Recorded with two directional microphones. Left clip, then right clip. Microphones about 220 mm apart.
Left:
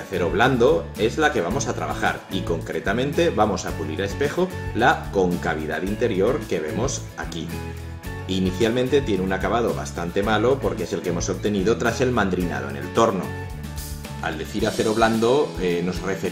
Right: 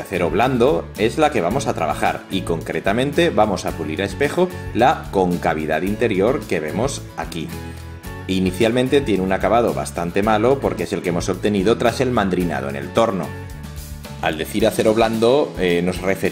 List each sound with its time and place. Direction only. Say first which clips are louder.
0.1 s speech: right 2 dB; 35° right (ahead or behind)
8.3 s speech: right 4 dB; 35° right (ahead or behind)
14.2 s speech: right 7 dB; 40° right (ahead or behind)